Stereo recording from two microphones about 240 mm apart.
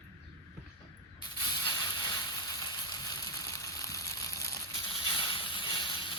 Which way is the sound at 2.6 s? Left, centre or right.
Centre.